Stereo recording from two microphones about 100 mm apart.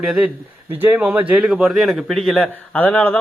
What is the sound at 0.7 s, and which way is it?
Speech, 20° right (ahead or behind).